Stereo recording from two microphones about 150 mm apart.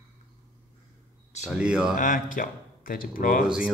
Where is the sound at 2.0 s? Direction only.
60° left (ahead or behind).